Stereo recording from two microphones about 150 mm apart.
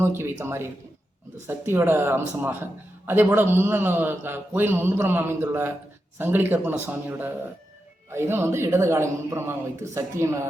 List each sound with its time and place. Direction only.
0.0 s a man's voice: 15° right (ahead or behind)